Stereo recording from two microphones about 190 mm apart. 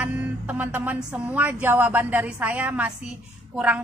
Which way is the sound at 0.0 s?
10° right (ahead or behind).